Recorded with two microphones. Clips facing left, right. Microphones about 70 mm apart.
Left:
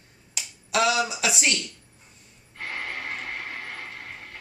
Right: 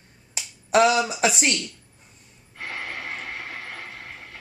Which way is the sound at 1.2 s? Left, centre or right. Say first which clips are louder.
Right 5 dB; right.